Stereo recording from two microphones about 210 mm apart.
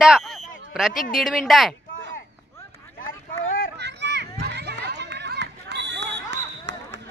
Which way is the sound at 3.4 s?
40° left (ahead or behind).